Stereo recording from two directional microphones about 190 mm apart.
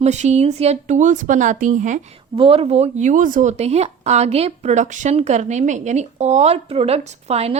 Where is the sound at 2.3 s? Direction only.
30° right (ahead or behind).